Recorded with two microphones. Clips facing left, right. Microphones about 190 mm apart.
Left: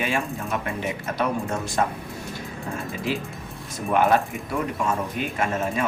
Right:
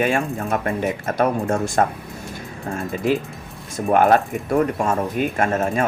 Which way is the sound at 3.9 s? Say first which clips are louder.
Right 4 dB; 50° right (ahead or behind).